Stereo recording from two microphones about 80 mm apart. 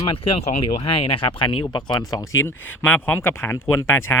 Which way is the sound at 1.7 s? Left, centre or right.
Left.